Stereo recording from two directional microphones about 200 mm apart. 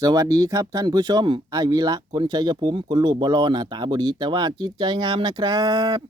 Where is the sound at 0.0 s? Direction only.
20° right (ahead or behind).